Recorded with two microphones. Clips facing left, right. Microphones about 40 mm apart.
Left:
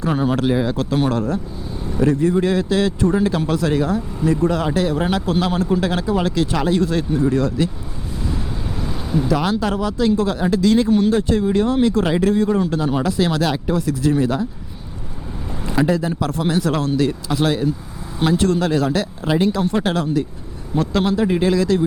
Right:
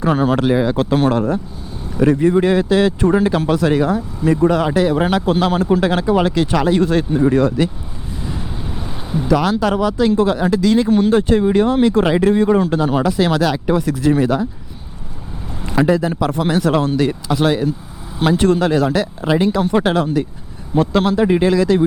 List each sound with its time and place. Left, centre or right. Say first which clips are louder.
0.0 s speech: right 4 dB; right
0.3 s speech: right 3 dB; centre
8.8 s vehicle: left 2 dB; centre
9.3 s speech: right 6 dB; centre
10.9 s speech: right 3 dB; right
15.6 s vehicle: right 3 dB; centre
16.0 s speech: right 3 dB; centre
21.5 s speech: right 3 dB; centre